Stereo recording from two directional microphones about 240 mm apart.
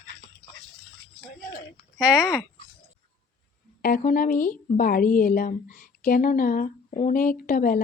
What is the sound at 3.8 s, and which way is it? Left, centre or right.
A woman's voice, left.